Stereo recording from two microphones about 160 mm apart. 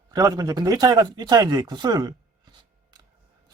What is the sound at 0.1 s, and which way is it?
Speech, 25° right (ahead or behind).